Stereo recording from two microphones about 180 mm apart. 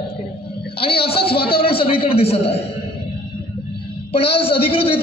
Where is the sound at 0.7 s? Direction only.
30° left (ahead or behind).